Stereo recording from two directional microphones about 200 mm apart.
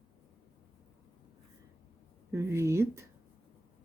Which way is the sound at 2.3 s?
15° right (ahead or behind).